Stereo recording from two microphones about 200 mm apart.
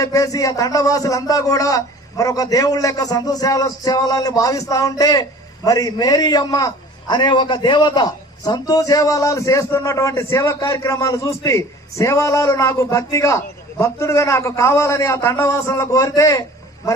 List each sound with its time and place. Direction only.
0.0 s a man's voice: 15° left (ahead or behind)